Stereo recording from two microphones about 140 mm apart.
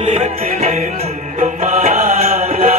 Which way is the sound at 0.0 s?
50° right (ahead or behind).